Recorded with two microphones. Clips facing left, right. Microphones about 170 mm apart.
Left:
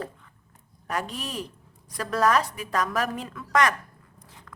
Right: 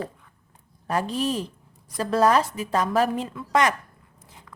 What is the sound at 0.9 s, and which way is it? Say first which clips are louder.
A woman's voice: right 7 dB; 30° right (ahead or behind).